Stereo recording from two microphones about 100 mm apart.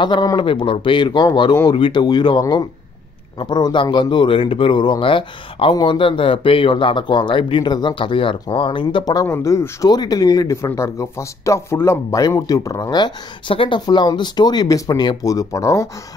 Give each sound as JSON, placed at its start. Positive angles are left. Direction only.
{"t": 0.0, "sound": "speech", "side_deg": 50}
{"t": 1.5, "sound": "speech", "side_deg": 35}
{"t": 1.8, "sound": "speech", "side_deg": 50}
{"t": 9.0, "sound": "speech", "side_deg": 35}